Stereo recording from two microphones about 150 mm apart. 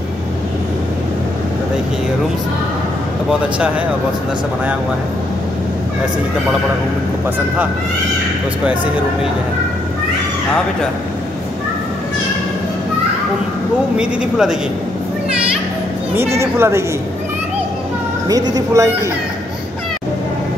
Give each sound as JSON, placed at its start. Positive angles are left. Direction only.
{"t": 3.3, "sound": "speech", "side_deg": -5}
{"t": 13.9, "sound": "speech", "side_deg": -5}
{"t": 16.3, "sound": "speech", "side_deg": -15}
{"t": 18.3, "sound": "a woman's voice", "side_deg": -25}